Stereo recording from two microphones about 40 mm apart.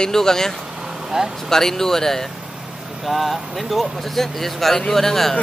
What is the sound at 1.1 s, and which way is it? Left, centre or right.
Speech, centre.